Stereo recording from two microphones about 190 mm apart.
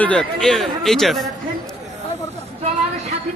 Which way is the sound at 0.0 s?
5° left (ahead or behind).